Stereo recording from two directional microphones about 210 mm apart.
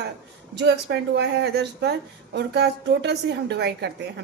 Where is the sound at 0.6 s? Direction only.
55° right (ahead or behind).